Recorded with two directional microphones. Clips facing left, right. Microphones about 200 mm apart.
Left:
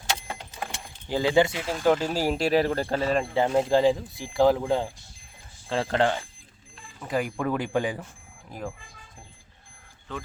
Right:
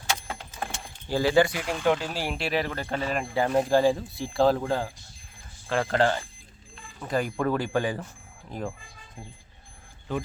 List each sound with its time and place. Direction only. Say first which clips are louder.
1.0 s speech: even; 20° left (ahead or behind)
1.8 s speech: left 4 dB; 40° left (ahead or behind); by 6.1 s 20° left (ahead or behind)
7.1 s speech: right 1 dB; 10° left (ahead or behind)
8.4 s speech: right 2 dB; 5° left (ahead or behind)